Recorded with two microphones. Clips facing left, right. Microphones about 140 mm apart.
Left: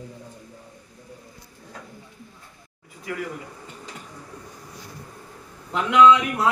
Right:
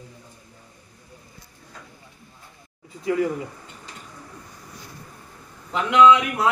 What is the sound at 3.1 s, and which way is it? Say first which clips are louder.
Speech: right 9 dB; 20° right (ahead or behind).